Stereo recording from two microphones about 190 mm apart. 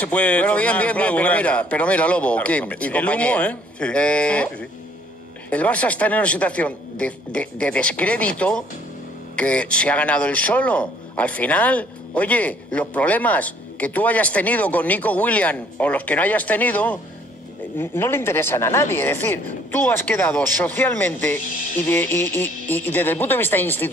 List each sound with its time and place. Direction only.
0.0 s a man's voice: 5° left (ahead or behind)